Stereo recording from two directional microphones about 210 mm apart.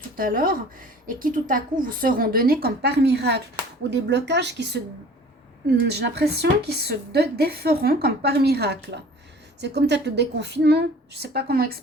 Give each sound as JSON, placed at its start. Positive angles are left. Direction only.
{"t": 0.2, "sound": "a woman's voice", "side_deg": -40}
{"t": 5.8, "sound": "a woman's voice", "side_deg": -50}